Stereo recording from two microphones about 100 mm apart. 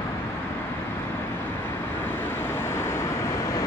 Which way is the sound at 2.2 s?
25° left (ahead or behind).